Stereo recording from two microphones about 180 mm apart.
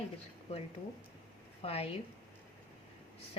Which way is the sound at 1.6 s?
35° left (ahead or behind).